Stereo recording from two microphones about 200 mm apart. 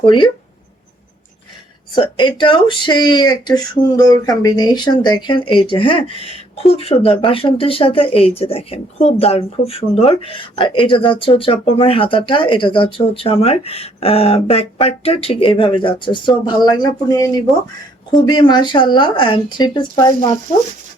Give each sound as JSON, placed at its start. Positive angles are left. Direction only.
{"t": 0.0, "sound": "speech", "side_deg": 25}
{"t": 2.0, "sound": "speech", "side_deg": 25}